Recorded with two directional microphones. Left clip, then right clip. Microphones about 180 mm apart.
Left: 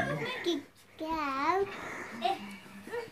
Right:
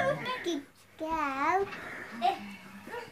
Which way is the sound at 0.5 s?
15° right (ahead or behind).